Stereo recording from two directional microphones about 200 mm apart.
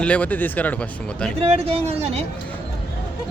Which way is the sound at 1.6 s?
30° right (ahead or behind).